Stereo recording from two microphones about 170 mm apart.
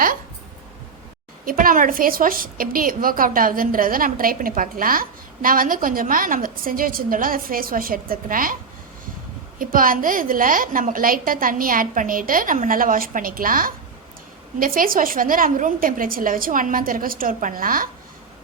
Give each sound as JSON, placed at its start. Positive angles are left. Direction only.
{"t": 1.5, "sound": "a woman's voice", "side_deg": -55}
{"t": 9.6, "sound": "a woman's voice", "side_deg": -55}